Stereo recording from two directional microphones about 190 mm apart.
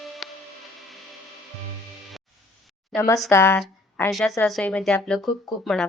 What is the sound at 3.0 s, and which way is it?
Speech, 15° left (ahead or behind).